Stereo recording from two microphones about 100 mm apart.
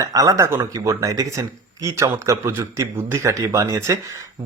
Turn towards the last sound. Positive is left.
turn(degrees=-30)  # may be behind; listen again after turning